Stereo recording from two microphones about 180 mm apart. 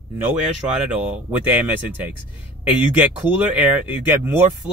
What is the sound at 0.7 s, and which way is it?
Speech, 5° right (ahead or behind).